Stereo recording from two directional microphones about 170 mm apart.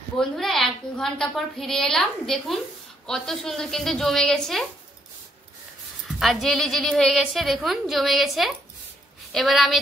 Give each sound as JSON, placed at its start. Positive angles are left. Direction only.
{"t": 0.2, "sound": "a woman's voice", "side_deg": 0}
{"t": 6.0, "sound": "a woman's voice", "side_deg": 0}